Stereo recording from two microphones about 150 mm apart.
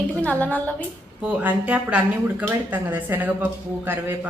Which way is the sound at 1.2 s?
10° right (ahead or behind).